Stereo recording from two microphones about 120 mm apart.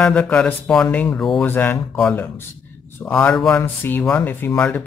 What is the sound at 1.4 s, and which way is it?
Speech, 15° left (ahead or behind).